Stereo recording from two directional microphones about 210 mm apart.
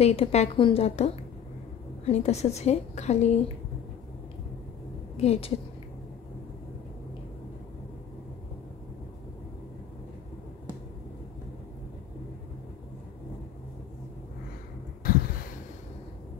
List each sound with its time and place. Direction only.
0.0 s a woman's voice: 30° left (ahead or behind)
5.1 s a woman's voice: 30° left (ahead or behind)
15.0 s a sound: 45° left (ahead or behind)